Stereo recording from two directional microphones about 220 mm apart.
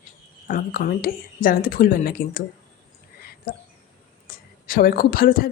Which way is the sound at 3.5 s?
40° left (ahead or behind).